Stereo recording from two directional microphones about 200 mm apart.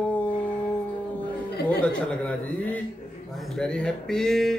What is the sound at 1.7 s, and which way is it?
A woman's voice, 5° left (ahead or behind).